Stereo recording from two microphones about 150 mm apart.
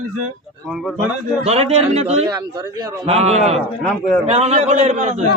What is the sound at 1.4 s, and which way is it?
Speech, 45° right (ahead or behind).